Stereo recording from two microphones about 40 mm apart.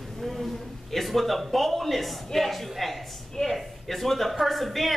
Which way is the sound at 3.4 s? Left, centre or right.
Centre.